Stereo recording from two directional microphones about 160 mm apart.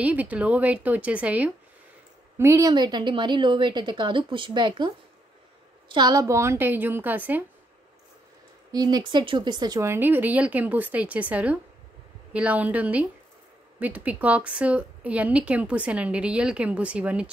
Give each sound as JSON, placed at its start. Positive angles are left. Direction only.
{"t": 0.0, "sound": "a woman's voice", "side_deg": -10}
{"t": 2.7, "sound": "a woman's voice", "side_deg": -25}
{"t": 8.7, "sound": "a woman's voice", "side_deg": -25}